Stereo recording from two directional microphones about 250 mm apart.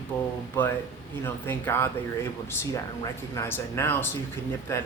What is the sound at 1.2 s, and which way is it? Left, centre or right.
Speech, centre.